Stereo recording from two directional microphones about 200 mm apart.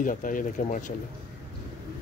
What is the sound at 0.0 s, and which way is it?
Speech, 40° left (ahead or behind).